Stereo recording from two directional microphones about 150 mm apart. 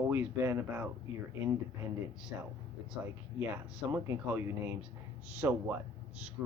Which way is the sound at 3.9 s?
15° right (ahead or behind).